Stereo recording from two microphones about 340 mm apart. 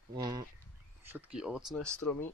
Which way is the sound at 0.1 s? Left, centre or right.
Centre.